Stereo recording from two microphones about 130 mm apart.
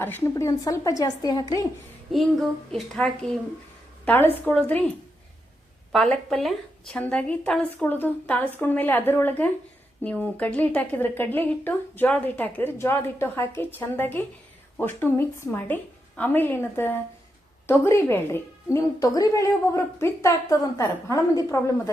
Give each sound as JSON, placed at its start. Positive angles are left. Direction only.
{"t": 0.0, "sound": "a woman's voice", "side_deg": 20}
{"t": 2.1, "sound": "speech", "side_deg": 0}
{"t": 4.0, "sound": "a woman's voice", "side_deg": 15}
{"t": 5.9, "sound": "a woman's voice", "side_deg": 5}